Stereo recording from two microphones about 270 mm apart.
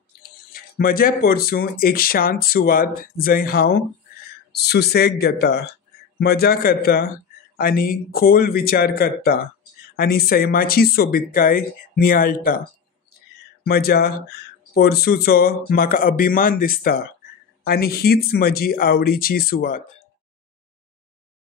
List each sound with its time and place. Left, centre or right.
0.5 s speech: left
13.7 s speech: left